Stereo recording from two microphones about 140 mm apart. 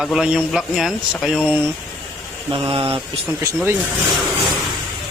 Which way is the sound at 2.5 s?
40° right (ahead or behind).